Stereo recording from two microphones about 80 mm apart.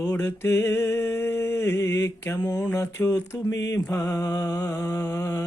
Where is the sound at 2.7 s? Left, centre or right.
Left.